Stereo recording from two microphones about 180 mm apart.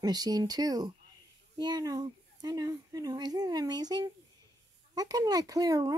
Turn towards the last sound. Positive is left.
turn(degrees=-20)  # may be behind; listen again after turning